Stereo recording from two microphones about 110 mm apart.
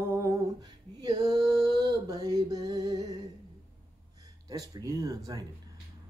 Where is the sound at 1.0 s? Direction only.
35° right (ahead or behind).